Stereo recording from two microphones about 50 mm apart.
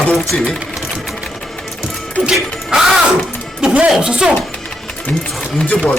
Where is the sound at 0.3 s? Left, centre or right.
Centre.